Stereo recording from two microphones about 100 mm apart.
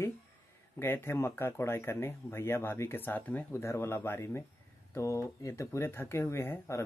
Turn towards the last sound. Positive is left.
turn(degrees=25)  # may be behind; listen again after turning